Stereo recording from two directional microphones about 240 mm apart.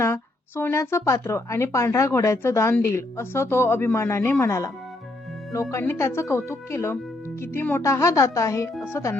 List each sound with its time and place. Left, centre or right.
0.0 s a woman's voice: centre
5.7 s a woman's voice: centre